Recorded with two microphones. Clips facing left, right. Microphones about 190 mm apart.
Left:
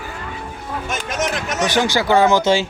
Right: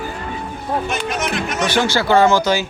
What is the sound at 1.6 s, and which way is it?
Speech, 15° left (ahead or behind).